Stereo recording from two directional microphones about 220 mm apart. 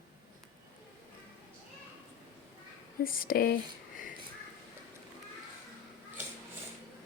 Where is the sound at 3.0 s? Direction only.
40° left (ahead or behind).